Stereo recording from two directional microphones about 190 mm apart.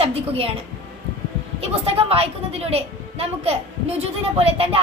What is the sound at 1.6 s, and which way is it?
A woman's voice, 30° right (ahead or behind).